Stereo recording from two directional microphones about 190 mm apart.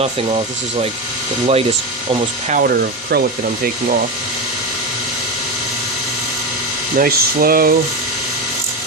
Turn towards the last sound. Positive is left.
turn(degrees=-50)  # may be behind; listen again after turning